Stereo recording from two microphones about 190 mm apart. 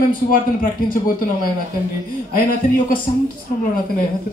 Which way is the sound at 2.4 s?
45° left (ahead or behind).